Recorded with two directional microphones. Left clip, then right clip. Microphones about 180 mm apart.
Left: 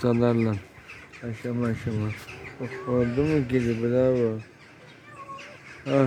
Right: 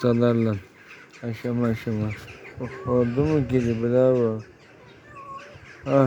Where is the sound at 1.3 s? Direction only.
30° right (ahead or behind).